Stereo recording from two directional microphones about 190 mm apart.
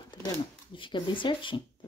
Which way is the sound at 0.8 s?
25° left (ahead or behind).